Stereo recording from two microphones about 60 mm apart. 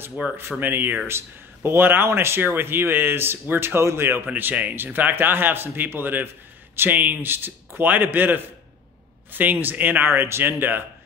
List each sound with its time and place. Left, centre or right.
0.4 s speech: right
4.3 s speech: right